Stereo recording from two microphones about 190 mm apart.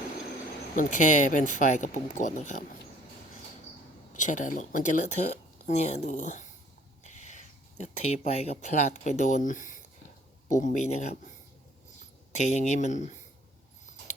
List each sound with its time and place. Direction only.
0.8 s speech: 40° left (ahead or behind)
4.1 s speech: 40° left (ahead or behind)
12.5 s speech: 35° left (ahead or behind)